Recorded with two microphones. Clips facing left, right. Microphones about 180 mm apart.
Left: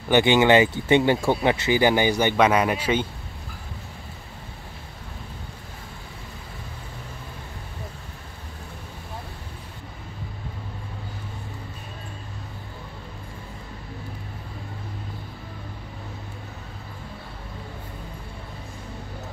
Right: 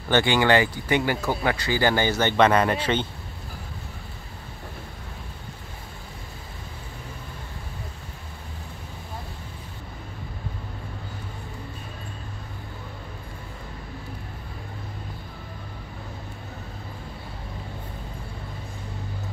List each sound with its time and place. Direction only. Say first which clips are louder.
0.1 s speech: left 3 dB; 20° left (ahead or behind)